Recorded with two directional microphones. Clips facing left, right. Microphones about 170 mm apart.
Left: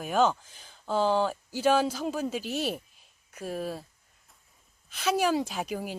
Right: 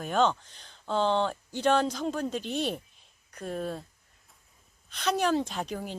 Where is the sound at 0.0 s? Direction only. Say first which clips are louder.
Left 1 dB; 5° left (ahead or behind).